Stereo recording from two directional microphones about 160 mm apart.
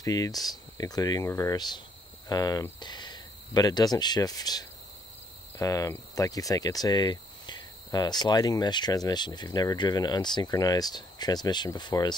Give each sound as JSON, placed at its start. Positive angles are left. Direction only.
{"t": 0.0, "sound": "speech", "side_deg": 25}